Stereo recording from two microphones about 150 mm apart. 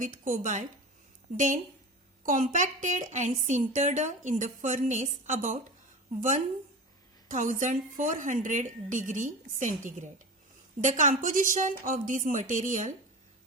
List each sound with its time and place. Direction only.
0.0 s a woman's voice: 60° right (ahead or behind)